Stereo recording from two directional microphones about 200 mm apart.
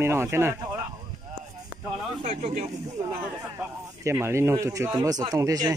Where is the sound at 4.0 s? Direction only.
15° right (ahead or behind).